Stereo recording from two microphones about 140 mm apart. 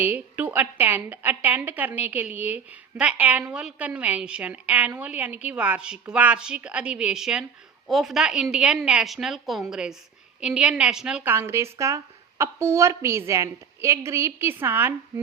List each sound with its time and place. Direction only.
0.0 s a woman's voice: 10° right (ahead or behind)